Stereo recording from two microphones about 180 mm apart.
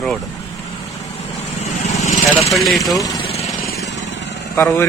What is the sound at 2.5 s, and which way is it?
Speech, centre (ahead or behind).